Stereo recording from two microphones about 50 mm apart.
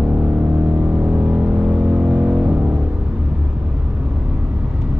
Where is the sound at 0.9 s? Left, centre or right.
Centre.